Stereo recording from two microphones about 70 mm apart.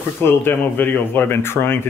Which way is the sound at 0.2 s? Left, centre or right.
Left.